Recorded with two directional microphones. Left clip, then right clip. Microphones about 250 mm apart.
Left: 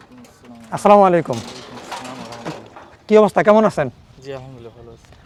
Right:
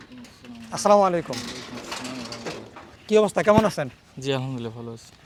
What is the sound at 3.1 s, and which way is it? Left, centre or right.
Speech, left.